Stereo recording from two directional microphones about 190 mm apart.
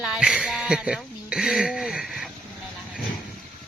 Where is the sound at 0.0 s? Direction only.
5° right (ahead or behind).